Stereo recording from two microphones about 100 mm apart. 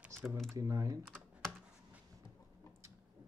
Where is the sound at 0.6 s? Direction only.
30° right (ahead or behind).